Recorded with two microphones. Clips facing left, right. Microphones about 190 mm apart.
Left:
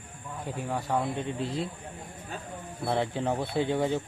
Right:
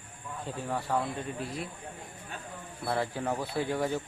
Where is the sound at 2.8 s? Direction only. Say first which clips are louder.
Left 3 dB; 25° left (ahead or behind).